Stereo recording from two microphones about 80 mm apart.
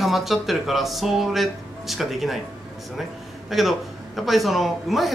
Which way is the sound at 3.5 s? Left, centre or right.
Centre.